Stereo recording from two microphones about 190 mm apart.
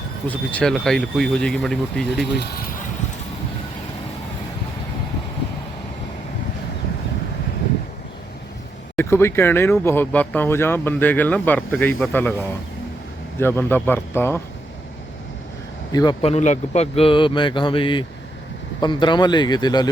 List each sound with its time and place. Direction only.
0.3 s speech: 5° left (ahead or behind)
2.3 s speech: 55° left (ahead or behind)
9.0 s speech: 15° left (ahead or behind)
15.9 s a man's voice: 20° left (ahead or behind)